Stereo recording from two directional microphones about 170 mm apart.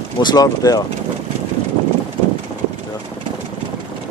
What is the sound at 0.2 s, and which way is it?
Speech, 25° left (ahead or behind).